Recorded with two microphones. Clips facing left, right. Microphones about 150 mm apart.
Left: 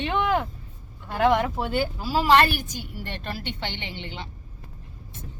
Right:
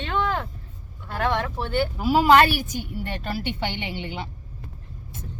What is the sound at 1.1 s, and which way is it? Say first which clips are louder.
Speech: left 4 dB; 15° left (ahead or behind).